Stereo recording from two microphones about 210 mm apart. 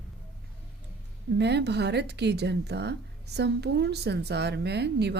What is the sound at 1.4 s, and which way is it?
Speech, 55° right (ahead or behind).